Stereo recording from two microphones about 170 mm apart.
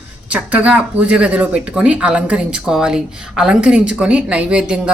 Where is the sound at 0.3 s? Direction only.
10° right (ahead or behind).